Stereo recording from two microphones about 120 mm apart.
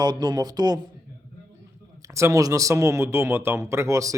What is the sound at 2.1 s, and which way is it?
Speech, 25° right (ahead or behind).